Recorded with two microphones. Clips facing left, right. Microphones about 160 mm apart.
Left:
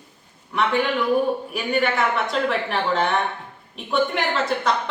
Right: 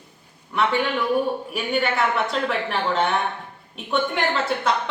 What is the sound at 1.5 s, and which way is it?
Speech, centre (ahead or behind).